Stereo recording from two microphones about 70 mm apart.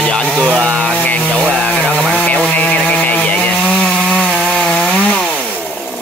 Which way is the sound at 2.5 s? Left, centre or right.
Left.